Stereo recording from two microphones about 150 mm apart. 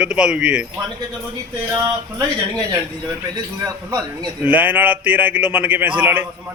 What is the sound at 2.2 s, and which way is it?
Speech, 20° right (ahead or behind).